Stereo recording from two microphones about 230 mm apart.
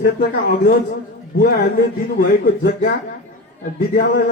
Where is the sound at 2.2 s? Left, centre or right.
Left.